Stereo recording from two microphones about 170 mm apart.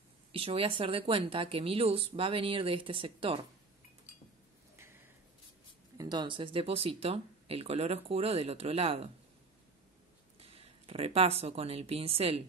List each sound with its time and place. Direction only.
0.3 s speech: 35° right (ahead or behind)
4.7 s a sound: 15° right (ahead or behind)
5.9 s speech: 25° right (ahead or behind)
10.4 s speech: 35° right (ahead or behind)